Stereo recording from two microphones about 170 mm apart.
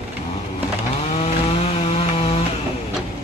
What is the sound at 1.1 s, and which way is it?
Chainsaw, 35° left (ahead or behind).